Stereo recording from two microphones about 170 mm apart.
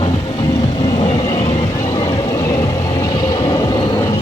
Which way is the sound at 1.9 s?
15° left (ahead or behind).